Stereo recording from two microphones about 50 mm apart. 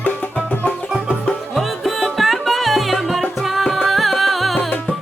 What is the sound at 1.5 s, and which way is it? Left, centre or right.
Music, centre.